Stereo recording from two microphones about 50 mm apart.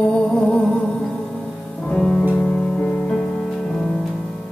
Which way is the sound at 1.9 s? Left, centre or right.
Centre.